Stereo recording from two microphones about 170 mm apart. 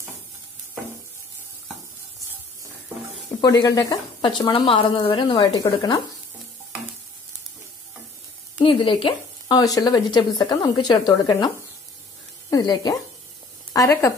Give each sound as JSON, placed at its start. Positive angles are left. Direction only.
{"t": 3.3, "sound": "speech", "side_deg": 25}
{"t": 8.6, "sound": "speech", "side_deg": 30}